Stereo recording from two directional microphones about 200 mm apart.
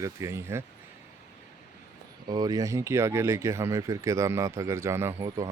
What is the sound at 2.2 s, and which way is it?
Speech, 20° right (ahead or behind).